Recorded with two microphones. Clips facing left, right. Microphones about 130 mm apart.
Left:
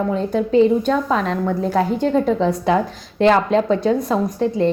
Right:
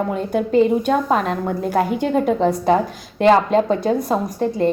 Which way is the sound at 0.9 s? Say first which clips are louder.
Right 1 dB; 50° right (ahead or behind).